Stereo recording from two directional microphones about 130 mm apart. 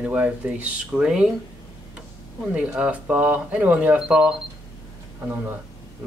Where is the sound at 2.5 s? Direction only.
10° right (ahead or behind).